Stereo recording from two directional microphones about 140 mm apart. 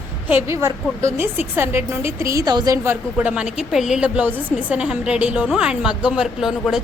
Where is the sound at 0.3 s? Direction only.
15° right (ahead or behind).